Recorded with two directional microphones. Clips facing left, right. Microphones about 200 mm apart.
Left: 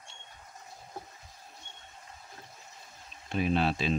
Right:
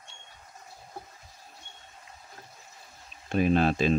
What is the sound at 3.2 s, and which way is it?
Speech, 45° right (ahead or behind).